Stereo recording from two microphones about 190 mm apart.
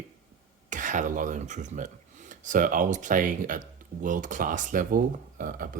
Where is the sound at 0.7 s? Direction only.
40° right (ahead or behind).